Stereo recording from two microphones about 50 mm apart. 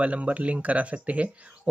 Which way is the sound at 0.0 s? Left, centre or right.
Right.